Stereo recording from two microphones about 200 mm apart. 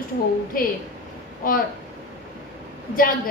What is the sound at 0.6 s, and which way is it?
Speech, 45° left (ahead or behind).